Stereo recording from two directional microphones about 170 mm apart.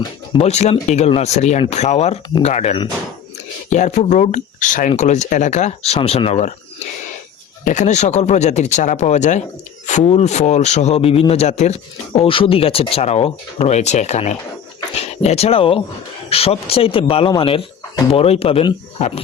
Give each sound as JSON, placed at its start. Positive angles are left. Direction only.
{"t": 0.3, "sound": "speech", "side_deg": 40}
{"t": 7.6, "sound": "speech", "side_deg": 45}